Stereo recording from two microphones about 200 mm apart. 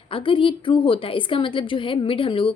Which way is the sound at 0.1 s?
25° left (ahead or behind).